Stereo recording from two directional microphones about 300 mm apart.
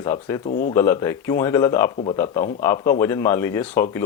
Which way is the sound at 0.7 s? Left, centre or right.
Centre.